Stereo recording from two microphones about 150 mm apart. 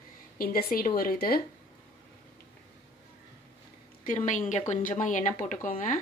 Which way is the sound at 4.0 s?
60° left (ahead or behind).